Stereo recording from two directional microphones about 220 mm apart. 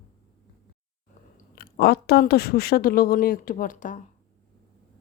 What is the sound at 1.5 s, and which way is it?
A woman's voice, 45° left (ahead or behind).